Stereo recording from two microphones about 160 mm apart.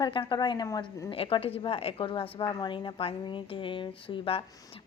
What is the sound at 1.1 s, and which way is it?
A woman's voice, 35° left (ahead or behind).